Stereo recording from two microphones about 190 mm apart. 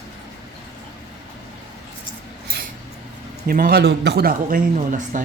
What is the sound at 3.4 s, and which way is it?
A man's voice, 50° right (ahead or behind).